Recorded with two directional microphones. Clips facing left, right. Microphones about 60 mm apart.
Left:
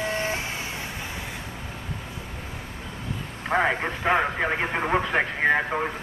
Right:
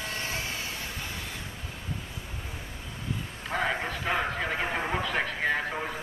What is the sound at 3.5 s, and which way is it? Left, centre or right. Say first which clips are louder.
Speech: left 6 dB; left.